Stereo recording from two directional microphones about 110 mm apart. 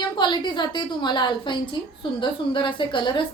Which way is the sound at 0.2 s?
45° left (ahead or behind).